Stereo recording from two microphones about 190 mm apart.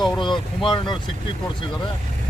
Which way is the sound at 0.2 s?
25° left (ahead or behind).